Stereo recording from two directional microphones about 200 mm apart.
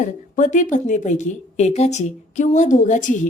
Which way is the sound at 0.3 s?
40° left (ahead or behind).